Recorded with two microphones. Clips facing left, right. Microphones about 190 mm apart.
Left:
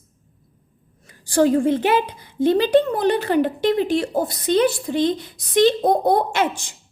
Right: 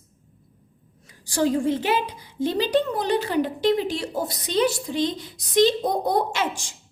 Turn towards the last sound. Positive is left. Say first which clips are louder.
# left 5 dB
turn(degrees=55)  # may be behind; listen again after turning